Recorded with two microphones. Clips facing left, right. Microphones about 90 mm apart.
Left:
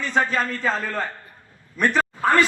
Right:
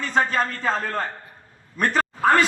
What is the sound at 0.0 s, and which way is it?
A man's voice, 40° right (ahead or behind).